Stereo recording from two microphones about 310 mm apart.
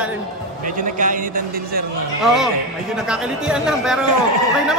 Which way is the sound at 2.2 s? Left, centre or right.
Centre.